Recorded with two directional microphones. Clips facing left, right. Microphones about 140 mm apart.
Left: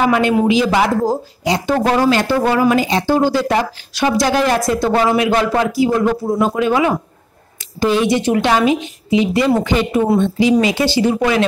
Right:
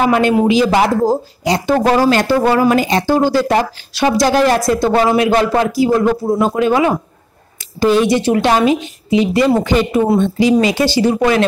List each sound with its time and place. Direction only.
0.0 s a woman's voice: 40° right (ahead or behind)
2.8 s speech: 50° right (ahead or behind)
3.3 s a woman's voice: 35° right (ahead or behind)